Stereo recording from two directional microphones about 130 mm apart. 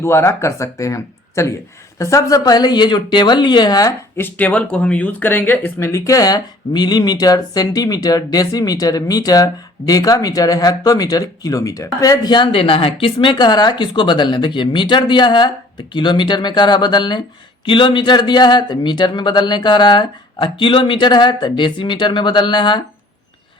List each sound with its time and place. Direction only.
0.0 s speech: 20° left (ahead or behind)
4.2 s speech: 10° left (ahead or behind); by 22.8 s 35° left (ahead or behind)